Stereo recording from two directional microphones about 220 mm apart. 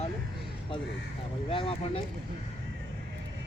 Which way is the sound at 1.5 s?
25° left (ahead or behind).